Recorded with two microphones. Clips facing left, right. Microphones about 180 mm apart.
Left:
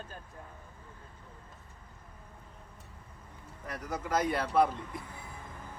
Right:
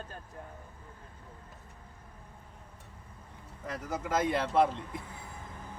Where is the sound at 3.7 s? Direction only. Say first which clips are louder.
Even; 25° right (ahead or behind).